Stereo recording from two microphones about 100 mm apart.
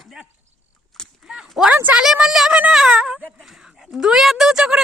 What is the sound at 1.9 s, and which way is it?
A woman's voice, 5° right (ahead or behind).